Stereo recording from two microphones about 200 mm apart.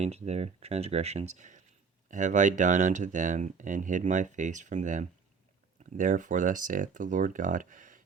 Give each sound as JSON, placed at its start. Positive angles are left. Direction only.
{"t": 0.0, "sound": "speech", "side_deg": -35}